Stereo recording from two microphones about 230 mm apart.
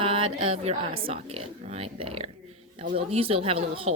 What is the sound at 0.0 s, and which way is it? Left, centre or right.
A woman's voice, right.